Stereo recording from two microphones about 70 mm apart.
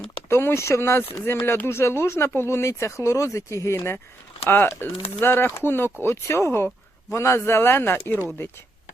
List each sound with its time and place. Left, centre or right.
0.3 s speech: left
4.4 s speech: left